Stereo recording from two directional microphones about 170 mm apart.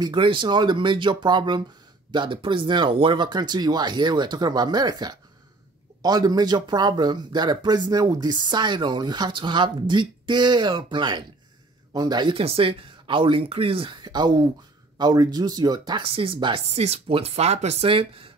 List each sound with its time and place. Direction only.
0.0 s speech: 30° right (ahead or behind)